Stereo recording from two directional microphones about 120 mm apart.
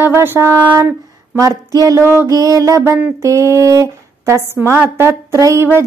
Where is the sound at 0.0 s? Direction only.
20° right (ahead or behind).